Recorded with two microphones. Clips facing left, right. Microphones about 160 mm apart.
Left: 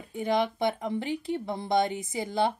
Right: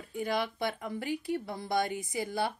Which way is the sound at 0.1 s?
20° left (ahead or behind).